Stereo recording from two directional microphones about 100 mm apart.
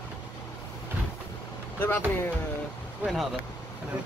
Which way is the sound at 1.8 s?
20° left (ahead or behind).